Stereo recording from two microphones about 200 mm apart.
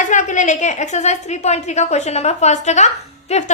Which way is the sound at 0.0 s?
40° left (ahead or behind).